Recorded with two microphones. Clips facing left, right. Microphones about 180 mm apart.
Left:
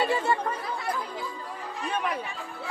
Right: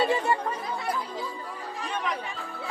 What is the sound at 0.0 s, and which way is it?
Chatter, 20° right (ahead or behind).